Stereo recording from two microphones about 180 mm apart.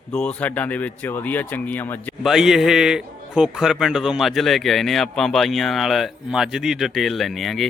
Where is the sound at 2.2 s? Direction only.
Centre (ahead or behind).